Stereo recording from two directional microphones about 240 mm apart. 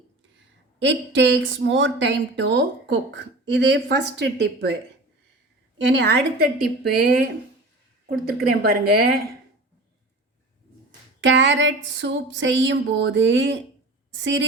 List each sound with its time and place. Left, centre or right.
0.8 s a woman's voice: right
5.7 s a woman's voice: right
8.2 s a woman's voice: right
11.2 s a woman's voice: right